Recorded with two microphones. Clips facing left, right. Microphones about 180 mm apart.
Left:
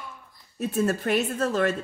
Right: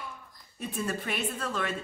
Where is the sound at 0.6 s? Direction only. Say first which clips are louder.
Left 8 dB; 45° left (ahead or behind).